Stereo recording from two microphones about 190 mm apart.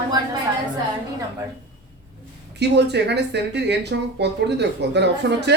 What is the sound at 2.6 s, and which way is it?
Speech, 65° right (ahead or behind).